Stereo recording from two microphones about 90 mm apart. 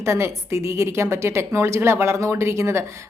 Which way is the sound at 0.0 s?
30° right (ahead or behind).